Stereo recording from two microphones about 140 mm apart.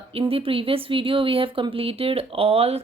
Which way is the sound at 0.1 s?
45° right (ahead or behind).